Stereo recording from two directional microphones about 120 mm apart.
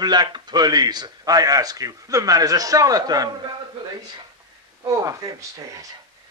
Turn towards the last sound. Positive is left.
turn(degrees=-25)  # may be behind; listen again after turning